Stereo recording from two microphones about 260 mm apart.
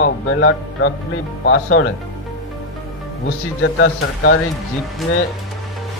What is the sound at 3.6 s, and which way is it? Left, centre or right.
Speech, left.